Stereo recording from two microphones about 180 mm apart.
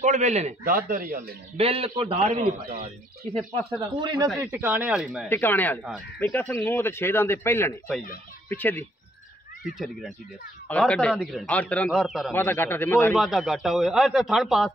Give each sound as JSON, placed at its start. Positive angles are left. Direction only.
{"t": 0.0, "sound": "a man's voice", "side_deg": -40}
{"t": 0.7, "sound": "a man's voice", "side_deg": -55}
{"t": 1.6, "sound": "a man's voice", "side_deg": -30}
{"t": 2.1, "sound": "a man's voice", "side_deg": -45}
{"t": 3.9, "sound": "speech", "side_deg": -25}
{"t": 4.4, "sound": "speech", "side_deg": -10}
{"t": 5.3, "sound": "a man's voice", "side_deg": 10}
{"t": 12.3, "sound": "a man's voice", "side_deg": 10}
{"t": 13.1, "sound": "speech", "side_deg": 0}